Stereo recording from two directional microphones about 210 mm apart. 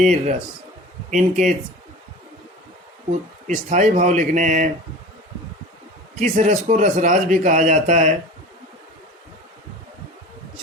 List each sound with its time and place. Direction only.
0.0 s a man's voice: 35° right (ahead or behind)
3.1 s a man's voice: 35° right (ahead or behind)
6.1 s a man's voice: 35° right (ahead or behind)